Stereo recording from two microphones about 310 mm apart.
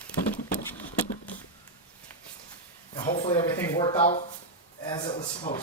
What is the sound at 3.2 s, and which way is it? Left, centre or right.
Speech, centre.